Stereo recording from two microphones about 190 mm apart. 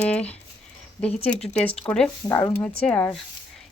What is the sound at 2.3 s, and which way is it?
Speech, 15° left (ahead or behind).